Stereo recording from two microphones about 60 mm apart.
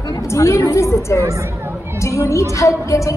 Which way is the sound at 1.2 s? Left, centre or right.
Right.